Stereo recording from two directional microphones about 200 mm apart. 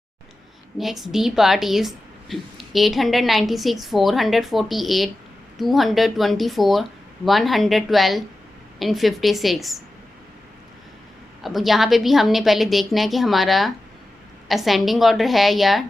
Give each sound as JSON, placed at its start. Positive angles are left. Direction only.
{"t": 0.8, "sound": "a woman's voice", "side_deg": 0}
{"t": 11.4, "sound": "a woman's voice", "side_deg": 0}